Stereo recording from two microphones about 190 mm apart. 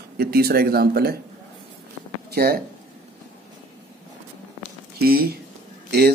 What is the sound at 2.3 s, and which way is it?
Speech, 55° right (ahead or behind).